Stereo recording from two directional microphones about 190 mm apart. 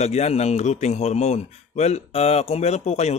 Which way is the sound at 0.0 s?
35° left (ahead or behind).